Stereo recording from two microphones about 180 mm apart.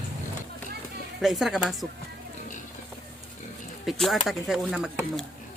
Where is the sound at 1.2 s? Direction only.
Centre (ahead or behind).